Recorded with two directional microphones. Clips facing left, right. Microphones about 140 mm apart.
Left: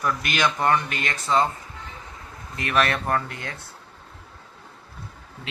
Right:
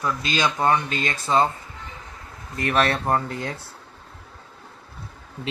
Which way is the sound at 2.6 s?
30° right (ahead or behind).